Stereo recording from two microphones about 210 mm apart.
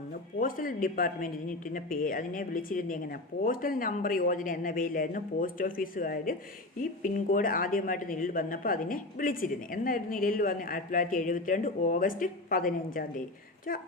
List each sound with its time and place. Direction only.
0.3 s speech: 40° left (ahead or behind)